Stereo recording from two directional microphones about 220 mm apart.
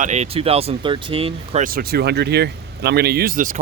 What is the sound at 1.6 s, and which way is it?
Speech, 45° right (ahead or behind).